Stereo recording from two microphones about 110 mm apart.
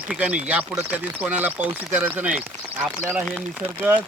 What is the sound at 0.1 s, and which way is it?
Speech, 10° right (ahead or behind).